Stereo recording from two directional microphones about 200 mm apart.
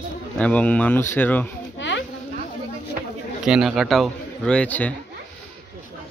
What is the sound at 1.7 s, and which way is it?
Insect, 65° left (ahead or behind).